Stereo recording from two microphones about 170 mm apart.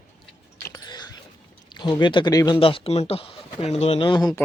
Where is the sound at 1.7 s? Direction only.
25° left (ahead or behind).